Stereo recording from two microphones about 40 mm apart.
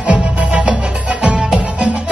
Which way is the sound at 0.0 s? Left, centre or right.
Right.